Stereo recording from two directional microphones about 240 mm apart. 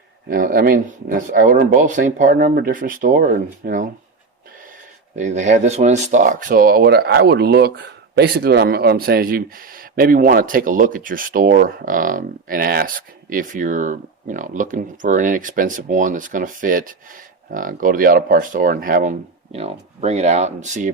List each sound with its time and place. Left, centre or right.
0.3 s speech: right
5.1 s speech: right